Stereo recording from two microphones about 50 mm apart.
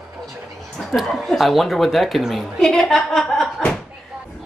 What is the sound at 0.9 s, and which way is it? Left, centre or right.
Speech, centre.